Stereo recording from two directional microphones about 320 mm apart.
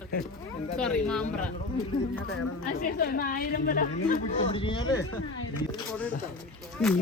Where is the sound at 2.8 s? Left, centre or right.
Left.